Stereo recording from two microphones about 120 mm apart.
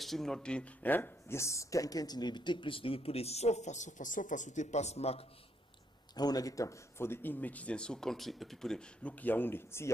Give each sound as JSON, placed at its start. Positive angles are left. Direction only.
{"t": 0.0, "sound": "speech", "side_deg": 5}
{"t": 6.1, "sound": "speech", "side_deg": 35}